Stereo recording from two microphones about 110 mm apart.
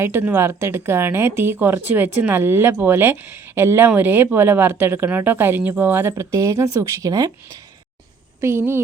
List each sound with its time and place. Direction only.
0.0 s a woman's voice: 20° right (ahead or behind)
8.4 s a woman's voice: 20° right (ahead or behind)